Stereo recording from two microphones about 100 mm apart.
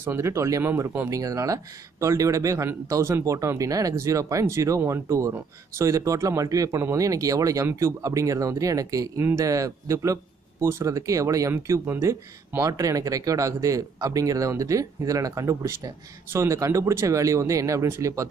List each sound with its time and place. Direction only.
0.0 s speech: 25° right (ahead or behind)